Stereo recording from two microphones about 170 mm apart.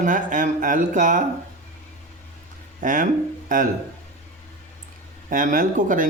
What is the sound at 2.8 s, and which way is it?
Speech, 50° right (ahead or behind).